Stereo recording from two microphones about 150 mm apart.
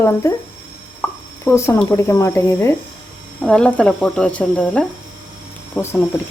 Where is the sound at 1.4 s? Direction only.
20° left (ahead or behind).